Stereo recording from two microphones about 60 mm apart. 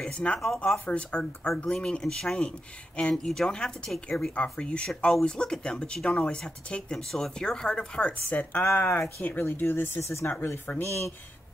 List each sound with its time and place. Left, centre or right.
0.0 s speech: centre
0.8 s speech: centre
8.1 s speech: left